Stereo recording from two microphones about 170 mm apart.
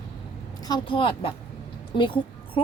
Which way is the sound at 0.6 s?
25° left (ahead or behind).